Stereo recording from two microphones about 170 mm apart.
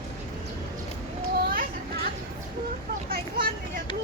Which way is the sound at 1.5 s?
60° right (ahead or behind).